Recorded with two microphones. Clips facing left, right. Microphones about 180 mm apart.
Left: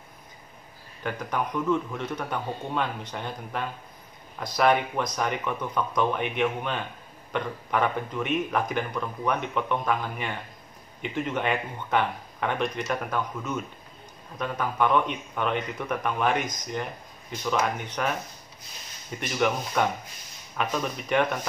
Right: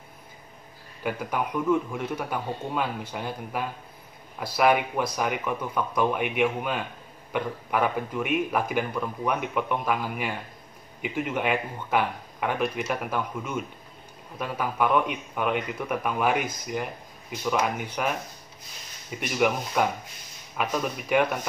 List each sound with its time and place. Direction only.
1.0 s a man's voice: 10° right (ahead or behind)